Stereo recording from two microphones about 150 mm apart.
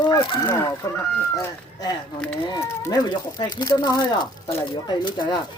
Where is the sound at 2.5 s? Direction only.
20° left (ahead or behind).